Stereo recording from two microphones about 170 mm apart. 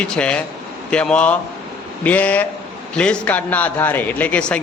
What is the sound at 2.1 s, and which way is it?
Speech, 10° left (ahead or behind).